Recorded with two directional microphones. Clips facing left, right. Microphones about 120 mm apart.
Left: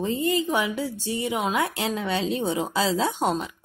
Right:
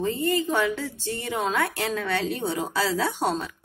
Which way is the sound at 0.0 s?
15° left (ahead or behind).